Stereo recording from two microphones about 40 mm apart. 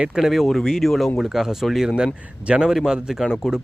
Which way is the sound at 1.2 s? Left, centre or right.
Centre.